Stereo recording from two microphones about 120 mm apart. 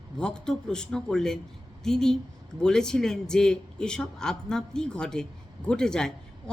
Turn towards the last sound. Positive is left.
turn(degrees=5)  # may be behind; listen again after turning